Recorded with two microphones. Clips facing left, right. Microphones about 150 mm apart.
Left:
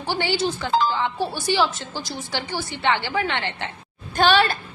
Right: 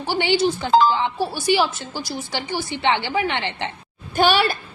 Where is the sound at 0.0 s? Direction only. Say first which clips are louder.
Right 4 dB; 15° right (ahead or behind).